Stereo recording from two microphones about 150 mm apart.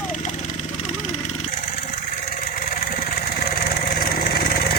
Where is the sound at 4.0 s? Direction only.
85° left.